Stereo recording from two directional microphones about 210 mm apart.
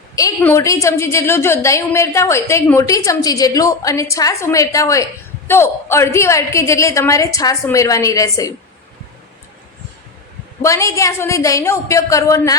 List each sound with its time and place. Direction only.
0.2 s a woman's voice: 15° left (ahead or behind)
10.6 s a woman's voice: 15° left (ahead or behind)